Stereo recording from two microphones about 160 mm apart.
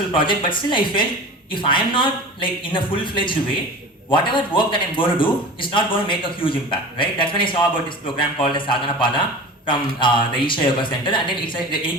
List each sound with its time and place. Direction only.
0.1 s a man's voice: 30° left (ahead or behind)